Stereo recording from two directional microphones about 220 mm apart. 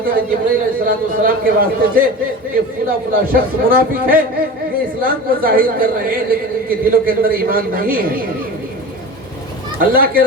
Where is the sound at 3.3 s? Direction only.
40° right (ahead or behind).